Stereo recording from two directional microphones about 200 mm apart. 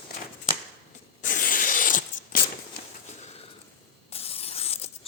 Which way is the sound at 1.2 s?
40° left (ahead or behind).